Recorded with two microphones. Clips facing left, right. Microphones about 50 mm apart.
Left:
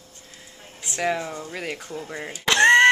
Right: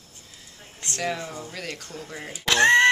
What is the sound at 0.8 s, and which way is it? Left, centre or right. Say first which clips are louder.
A woman's voice: left 4 dB; centre.